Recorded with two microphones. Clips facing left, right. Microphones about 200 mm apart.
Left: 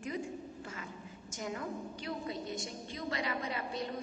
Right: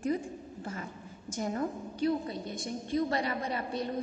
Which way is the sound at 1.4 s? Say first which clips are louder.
Right 6 dB; 40° right (ahead or behind).